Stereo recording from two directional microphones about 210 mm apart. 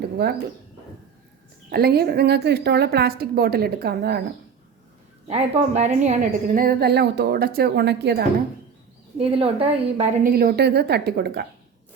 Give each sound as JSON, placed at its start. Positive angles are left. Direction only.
{"t": 0.0, "sound": "a woman's voice", "side_deg": -50}
{"t": 1.7, "sound": "a woman's voice", "side_deg": -50}
{"t": 5.3, "sound": "a woman's voice", "side_deg": -30}
{"t": 9.1, "sound": "a woman's voice", "side_deg": -25}
{"t": 10.2, "sound": "a woman's voice", "side_deg": -45}